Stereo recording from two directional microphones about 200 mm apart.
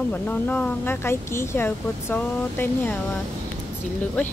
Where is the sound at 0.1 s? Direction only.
10° left (ahead or behind).